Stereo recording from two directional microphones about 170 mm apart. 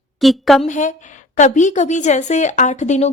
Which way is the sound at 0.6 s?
45° left (ahead or behind).